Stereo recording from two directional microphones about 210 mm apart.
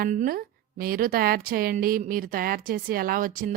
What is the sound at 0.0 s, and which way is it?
A woman's voice, 40° right (ahead or behind).